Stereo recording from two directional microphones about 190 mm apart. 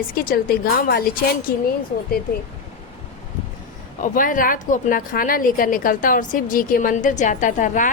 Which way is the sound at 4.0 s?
45° left (ahead or behind).